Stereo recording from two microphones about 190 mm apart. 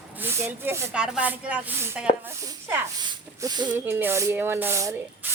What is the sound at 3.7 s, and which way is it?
Speech, 10° right (ahead or behind).